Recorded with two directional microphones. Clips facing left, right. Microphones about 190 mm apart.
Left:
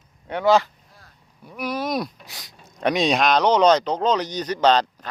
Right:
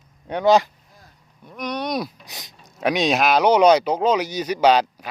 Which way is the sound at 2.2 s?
20° right (ahead or behind).